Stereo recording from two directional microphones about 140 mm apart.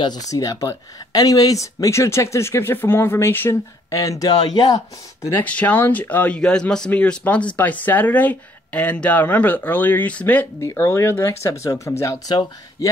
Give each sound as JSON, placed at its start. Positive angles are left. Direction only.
{"t": 0.0, "sound": "speech", "side_deg": 25}
{"t": 5.2, "sound": "speech", "side_deg": 15}